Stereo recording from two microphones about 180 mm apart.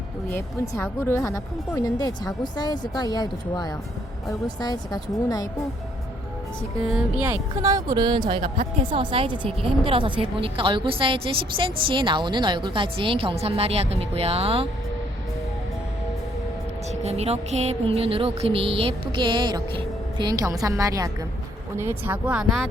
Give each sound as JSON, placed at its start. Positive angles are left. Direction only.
{"t": 0.3, "sound": "speech", "side_deg": 15}
{"t": 7.3, "sound": "a woman's voice", "side_deg": -20}
{"t": 16.9, "sound": "music", "side_deg": -35}
{"t": 21.8, "sound": "speech", "side_deg": -10}